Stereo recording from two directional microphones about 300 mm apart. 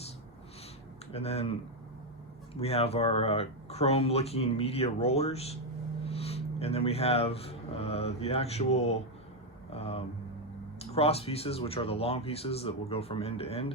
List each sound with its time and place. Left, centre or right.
1.1 s speech: centre
2.6 s speech: centre